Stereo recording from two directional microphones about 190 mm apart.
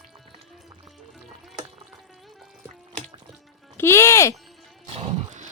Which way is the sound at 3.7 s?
15° left (ahead or behind).